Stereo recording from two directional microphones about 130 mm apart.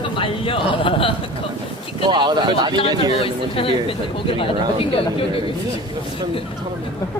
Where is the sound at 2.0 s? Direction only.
35° right (ahead or behind).